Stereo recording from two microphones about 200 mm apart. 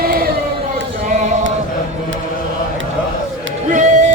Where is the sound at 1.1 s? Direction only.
35° right (ahead or behind).